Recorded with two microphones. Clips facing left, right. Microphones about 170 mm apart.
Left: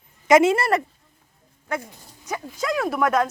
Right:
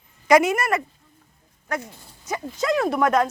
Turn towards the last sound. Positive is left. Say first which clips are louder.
# right 1 dB
turn(degrees=0)  # may be behind; listen again after turning